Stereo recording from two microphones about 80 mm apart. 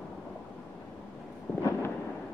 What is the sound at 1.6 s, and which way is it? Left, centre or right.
Fireworks, left.